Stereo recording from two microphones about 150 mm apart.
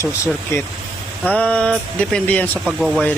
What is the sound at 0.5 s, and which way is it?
Speech, 20° left (ahead or behind).